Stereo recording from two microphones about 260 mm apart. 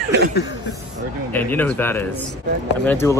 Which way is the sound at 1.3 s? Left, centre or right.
Centre.